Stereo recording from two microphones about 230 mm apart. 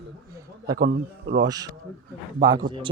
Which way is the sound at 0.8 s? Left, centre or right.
Right.